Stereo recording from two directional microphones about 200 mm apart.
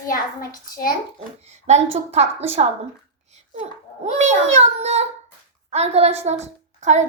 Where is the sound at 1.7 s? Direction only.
35° right (ahead or behind).